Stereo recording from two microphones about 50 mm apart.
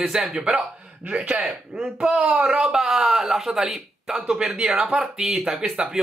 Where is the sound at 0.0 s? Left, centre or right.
Centre.